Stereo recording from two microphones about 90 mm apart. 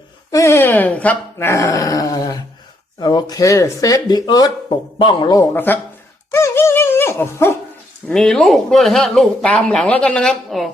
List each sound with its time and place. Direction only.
0.3 s growling: 35° left (ahead or behind)
0.7 s speech: 15° left (ahead or behind)
1.5 s growling: 35° left (ahead or behind)
3.0 s speech: 50° left (ahead or behind)
4.9 s a man's voice: 65° left (ahead or behind)
5.5 s speech: 20° left (ahead or behind)
6.3 s a sound: 30° left (ahead or behind)
8.0 s speech: 5° left (ahead or behind)